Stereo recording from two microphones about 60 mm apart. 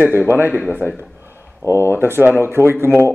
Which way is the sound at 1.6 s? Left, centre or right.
Left.